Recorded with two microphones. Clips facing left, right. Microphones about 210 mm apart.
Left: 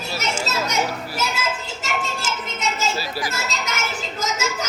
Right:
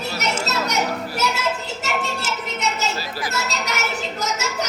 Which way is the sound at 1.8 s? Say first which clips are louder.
Right 1 dB; 65° right (ahead or behind).